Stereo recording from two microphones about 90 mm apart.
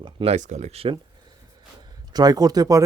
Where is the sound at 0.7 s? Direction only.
90° right.